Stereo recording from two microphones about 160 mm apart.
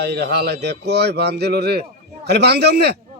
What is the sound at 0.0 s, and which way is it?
Speech, 90° right.